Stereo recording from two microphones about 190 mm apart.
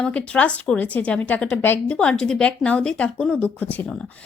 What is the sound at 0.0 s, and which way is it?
A woman's voice, 5° left (ahead or behind).